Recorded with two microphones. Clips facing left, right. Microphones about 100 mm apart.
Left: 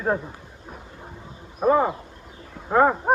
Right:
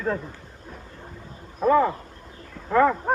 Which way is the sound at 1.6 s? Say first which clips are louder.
Even; 20° left (ahead or behind).